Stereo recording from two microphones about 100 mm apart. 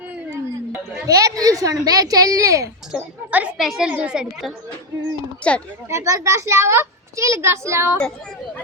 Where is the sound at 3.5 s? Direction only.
5° right (ahead or behind).